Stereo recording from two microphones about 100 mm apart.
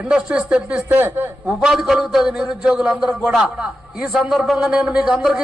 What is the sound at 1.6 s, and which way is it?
A man's voice, 5° right (ahead or behind).